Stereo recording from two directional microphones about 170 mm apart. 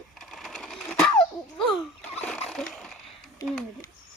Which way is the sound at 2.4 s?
Centre (ahead or behind).